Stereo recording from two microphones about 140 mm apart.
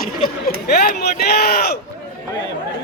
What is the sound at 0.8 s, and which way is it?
Speech, 90° left.